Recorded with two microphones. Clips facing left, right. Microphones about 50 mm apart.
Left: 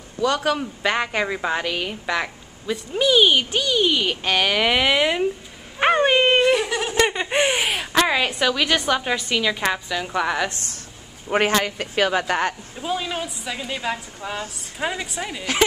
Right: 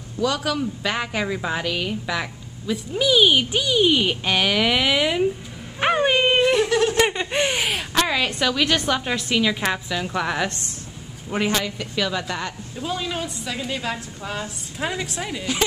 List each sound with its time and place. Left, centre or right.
0.2 s a man's voice: left
0.8 s a woman's voice: centre
4.2 s a woman's voice: centre
5.8 s dog: centre
7.2 s a woman's voice: centre
11.3 s speech: left
12.7 s a woman's voice: centre